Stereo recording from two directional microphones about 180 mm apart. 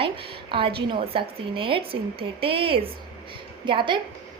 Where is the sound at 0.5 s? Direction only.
30° right (ahead or behind).